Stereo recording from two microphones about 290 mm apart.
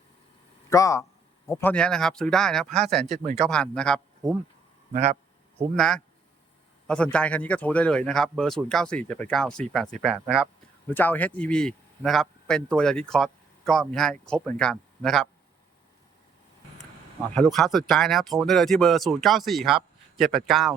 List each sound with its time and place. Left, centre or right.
0.7 s speech: centre
4.9 s speech: right
5.5 s speech: centre
17.3 s speech: centre